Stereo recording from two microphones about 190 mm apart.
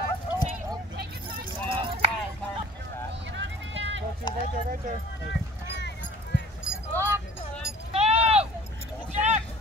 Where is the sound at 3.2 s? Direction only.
75° right (ahead or behind).